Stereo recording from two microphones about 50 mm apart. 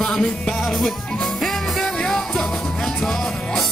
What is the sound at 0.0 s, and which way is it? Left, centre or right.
Music, centre.